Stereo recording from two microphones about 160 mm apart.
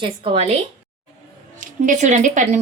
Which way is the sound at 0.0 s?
40° right (ahead or behind).